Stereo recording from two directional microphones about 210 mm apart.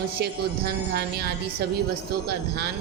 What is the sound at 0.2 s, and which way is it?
A woman's voice, 50° right (ahead or behind).